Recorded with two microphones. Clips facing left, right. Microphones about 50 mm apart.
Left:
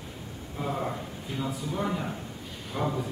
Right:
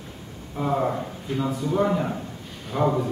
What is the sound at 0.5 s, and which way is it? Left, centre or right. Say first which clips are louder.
Speech: right 8 dB; right.